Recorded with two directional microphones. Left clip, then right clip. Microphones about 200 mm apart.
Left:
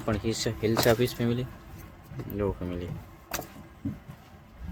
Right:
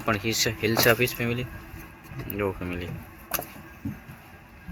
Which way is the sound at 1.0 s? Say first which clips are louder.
Right 2 dB; 25° left (ahead or behind).